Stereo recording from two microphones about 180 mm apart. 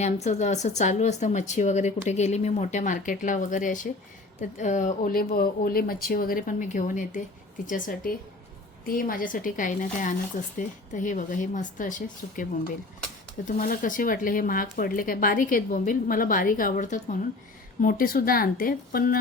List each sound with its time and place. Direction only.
0.0 s speech: 40° left (ahead or behind)
13.6 s speech: 50° left (ahead or behind)